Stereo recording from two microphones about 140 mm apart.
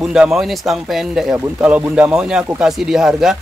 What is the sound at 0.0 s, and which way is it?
Speech, 5° right (ahead or behind).